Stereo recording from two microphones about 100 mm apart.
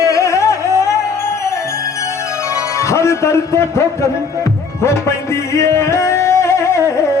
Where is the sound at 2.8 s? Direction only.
30° left (ahead or behind).